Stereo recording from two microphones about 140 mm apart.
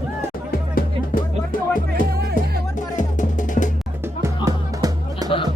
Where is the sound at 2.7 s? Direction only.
65° left (ahead or behind).